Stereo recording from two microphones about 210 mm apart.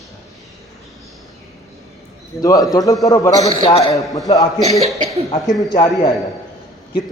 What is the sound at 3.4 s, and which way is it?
Speech, 30° left (ahead or behind).